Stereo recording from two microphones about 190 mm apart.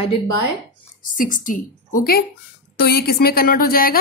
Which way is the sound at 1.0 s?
45° left (ahead or behind).